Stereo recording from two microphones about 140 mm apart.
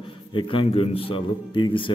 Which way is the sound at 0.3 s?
35° left (ahead or behind).